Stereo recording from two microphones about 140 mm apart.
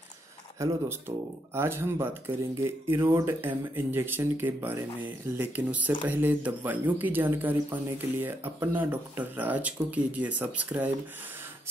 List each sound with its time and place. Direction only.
0.6 s speech: 20° right (ahead or behind)